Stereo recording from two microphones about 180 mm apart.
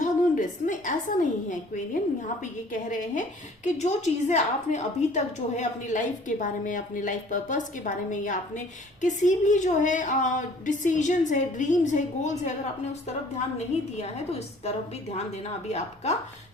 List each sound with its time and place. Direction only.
0.0 s a woman's voice: 45° left (ahead or behind)